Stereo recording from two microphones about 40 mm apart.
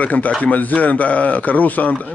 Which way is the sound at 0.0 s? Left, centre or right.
Left.